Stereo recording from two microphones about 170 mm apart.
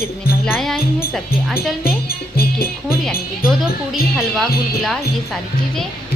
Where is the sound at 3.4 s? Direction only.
Centre (ahead or behind).